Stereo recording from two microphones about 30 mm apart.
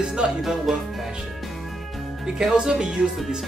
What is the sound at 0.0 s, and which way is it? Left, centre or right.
Speech, right.